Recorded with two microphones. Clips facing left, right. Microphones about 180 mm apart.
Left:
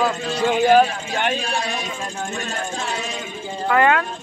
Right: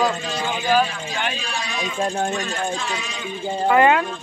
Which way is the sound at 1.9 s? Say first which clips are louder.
Right 6 dB; 40° right (ahead or behind).